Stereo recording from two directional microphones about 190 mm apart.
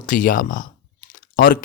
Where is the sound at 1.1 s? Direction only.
50° left (ahead or behind).